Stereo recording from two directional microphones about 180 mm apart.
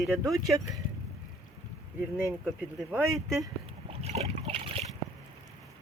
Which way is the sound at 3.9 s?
35° right (ahead or behind).